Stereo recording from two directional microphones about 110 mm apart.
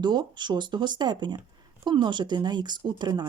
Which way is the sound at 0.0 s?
40° right (ahead or behind).